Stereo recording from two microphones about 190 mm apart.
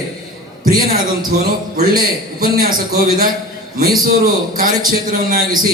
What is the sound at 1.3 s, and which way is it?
Speech, 50° right (ahead or behind).